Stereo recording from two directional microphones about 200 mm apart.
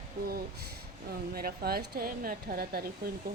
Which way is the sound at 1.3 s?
50° right (ahead or behind).